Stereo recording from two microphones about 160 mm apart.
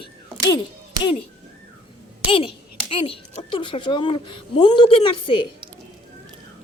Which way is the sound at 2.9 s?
35° left (ahead or behind).